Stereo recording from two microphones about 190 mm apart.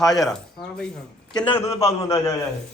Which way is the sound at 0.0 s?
Centre (ahead or behind).